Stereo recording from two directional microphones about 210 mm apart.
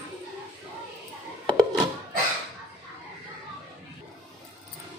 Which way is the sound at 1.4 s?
20° right (ahead or behind).